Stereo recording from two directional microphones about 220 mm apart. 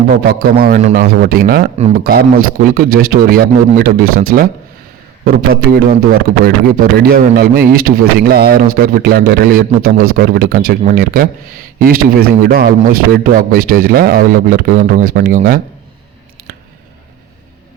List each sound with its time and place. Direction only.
0.1 s a man's voice: 45° right (ahead or behind)